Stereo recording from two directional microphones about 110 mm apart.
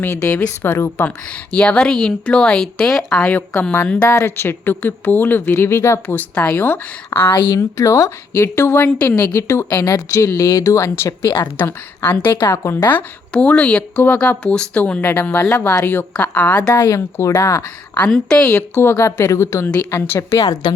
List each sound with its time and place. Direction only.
0.0 s speech: 25° left (ahead or behind)
4.0 s speech: 25° left (ahead or behind)
7.3 s speech: 45° left (ahead or behind); by 9.3 s 10° left (ahead or behind)
9.3 s speech: 25° left (ahead or behind)
16.6 s speech: 30° left (ahead or behind)
17.9 s speech: 10° left (ahead or behind)
18.7 s speech: 20° left (ahead or behind); by 20.7 s 40° left (ahead or behind)